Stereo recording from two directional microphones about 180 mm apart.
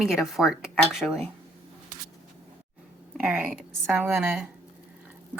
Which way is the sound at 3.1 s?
10° right (ahead or behind).